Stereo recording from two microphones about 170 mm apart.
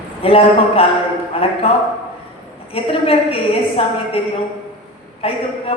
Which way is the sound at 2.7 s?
35° left (ahead or behind).